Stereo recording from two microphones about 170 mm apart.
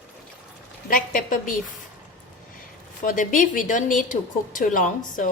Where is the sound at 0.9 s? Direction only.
55° left (ahead or behind).